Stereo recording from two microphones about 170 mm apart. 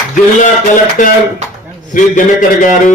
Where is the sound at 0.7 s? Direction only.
50° left (ahead or behind).